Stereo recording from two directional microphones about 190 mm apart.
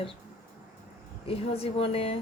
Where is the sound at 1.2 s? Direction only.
30° left (ahead or behind).